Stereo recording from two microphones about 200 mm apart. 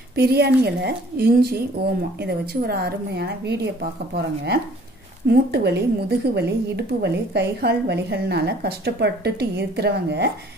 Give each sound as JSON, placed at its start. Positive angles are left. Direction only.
{"t": 0.1, "sound": "a woman's voice", "side_deg": -55}